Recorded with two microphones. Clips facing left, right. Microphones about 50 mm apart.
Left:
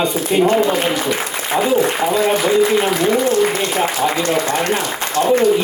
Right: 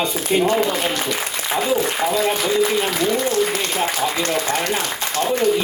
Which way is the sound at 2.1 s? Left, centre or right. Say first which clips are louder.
Left 4 dB; left.